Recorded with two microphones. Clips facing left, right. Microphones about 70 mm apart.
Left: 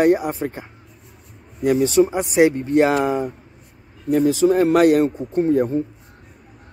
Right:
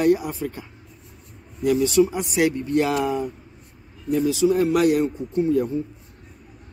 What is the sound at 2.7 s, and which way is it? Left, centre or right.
Speech, left.